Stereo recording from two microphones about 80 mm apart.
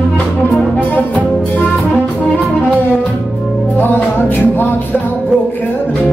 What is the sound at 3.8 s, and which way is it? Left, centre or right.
Music, left.